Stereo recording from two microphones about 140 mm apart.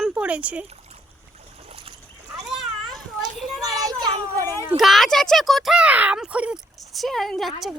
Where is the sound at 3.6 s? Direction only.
25° right (ahead or behind).